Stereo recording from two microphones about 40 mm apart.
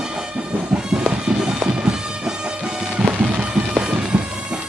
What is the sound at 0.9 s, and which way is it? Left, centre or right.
Music, right.